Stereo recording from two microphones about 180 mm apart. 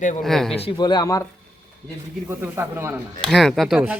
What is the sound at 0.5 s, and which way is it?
Speech, 30° left (ahead or behind).